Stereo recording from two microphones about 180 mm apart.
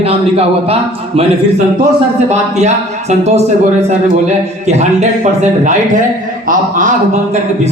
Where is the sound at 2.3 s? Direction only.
40° right (ahead or behind).